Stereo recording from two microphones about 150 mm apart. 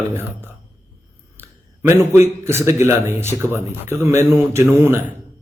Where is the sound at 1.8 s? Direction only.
15° right (ahead or behind).